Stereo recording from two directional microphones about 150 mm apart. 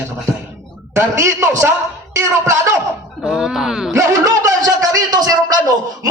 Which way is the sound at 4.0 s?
25° right (ahead or behind).